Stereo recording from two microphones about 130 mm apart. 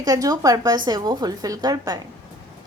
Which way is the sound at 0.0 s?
30° right (ahead or behind).